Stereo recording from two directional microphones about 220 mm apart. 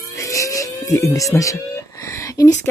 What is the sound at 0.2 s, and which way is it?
Music, 15° left (ahead or behind).